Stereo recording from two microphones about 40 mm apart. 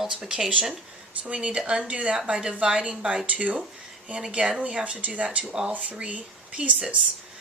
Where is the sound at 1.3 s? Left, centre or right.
Right.